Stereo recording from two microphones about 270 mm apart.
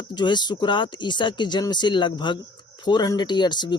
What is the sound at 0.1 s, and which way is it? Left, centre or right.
Speech, centre.